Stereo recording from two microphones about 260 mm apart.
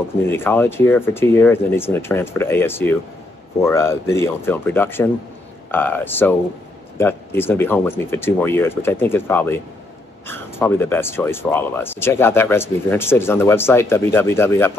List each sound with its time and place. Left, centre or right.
0.3 s speech: centre